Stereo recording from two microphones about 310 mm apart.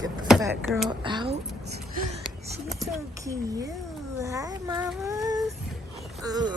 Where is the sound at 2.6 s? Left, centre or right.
Centre.